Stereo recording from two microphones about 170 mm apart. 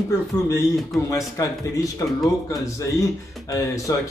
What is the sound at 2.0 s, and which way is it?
A man's voice, 15° left (ahead or behind).